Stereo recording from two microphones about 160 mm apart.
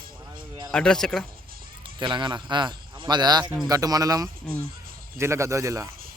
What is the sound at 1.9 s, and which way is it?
A man's voice, 30° right (ahead or behind).